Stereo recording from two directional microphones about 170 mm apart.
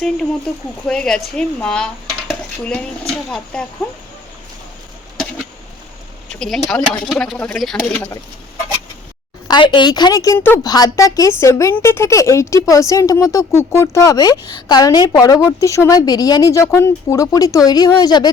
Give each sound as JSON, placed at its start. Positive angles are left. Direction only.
{"t": 0.9, "sound": "speech", "side_deg": 5}
{"t": 6.7, "sound": "speech", "side_deg": 0}
{"t": 9.5, "sound": "a woman's voice", "side_deg": 25}